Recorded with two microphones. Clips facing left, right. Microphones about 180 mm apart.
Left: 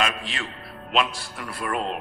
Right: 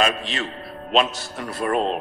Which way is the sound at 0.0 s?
35° right (ahead or behind).